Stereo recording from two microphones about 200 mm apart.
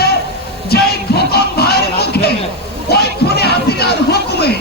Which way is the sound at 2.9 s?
55° left (ahead or behind).